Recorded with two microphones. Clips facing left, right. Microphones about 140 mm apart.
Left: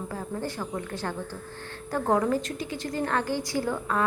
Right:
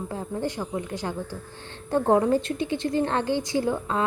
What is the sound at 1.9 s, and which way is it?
A woman's voice, 25° right (ahead or behind).